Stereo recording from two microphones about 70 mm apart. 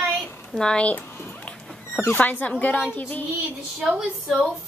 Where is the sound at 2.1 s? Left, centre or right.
Left.